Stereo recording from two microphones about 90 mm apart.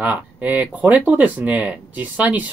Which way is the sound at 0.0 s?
20° right (ahead or behind).